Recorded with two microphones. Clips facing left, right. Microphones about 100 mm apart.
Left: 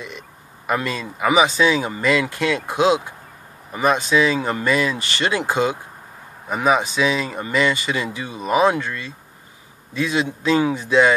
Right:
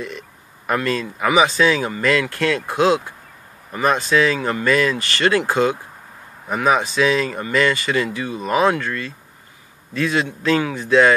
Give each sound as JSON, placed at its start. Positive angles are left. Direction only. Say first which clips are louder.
{"t": 0.7, "sound": "speech", "louder": "right 2 dB", "side_deg": 15}